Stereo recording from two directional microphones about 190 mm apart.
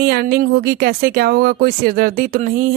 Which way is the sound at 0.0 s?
55° right (ahead or behind).